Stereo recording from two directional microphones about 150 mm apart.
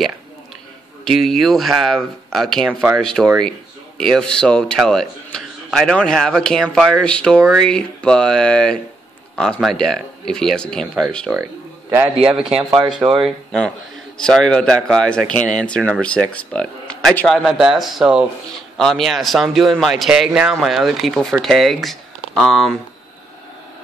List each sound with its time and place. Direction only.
1.0 s speech: centre (ahead or behind)
11.3 s music: 15° right (ahead or behind)
12.4 s speech: 35° right (ahead or behind)
12.9 s speech: 5° right (ahead or behind)
17.3 s speech: centre (ahead or behind)